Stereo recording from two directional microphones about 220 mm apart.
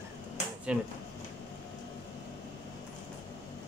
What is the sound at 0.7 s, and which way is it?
Speech, 5° right (ahead or behind).